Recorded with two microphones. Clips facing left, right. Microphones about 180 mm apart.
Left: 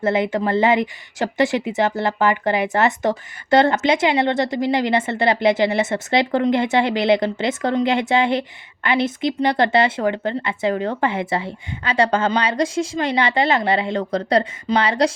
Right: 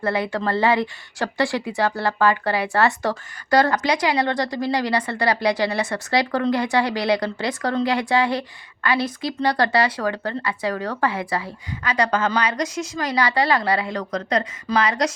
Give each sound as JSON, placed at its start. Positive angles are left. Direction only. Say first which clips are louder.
{"t": 0.0, "sound": "speech", "louder": "left 4 dB", "side_deg": 20}